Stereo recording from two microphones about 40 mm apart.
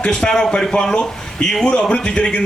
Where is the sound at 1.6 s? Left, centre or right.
Left.